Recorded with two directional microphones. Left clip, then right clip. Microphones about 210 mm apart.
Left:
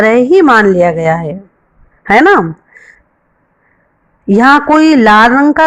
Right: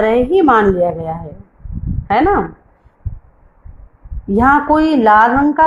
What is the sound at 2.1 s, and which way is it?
Speech, 35° left (ahead or behind).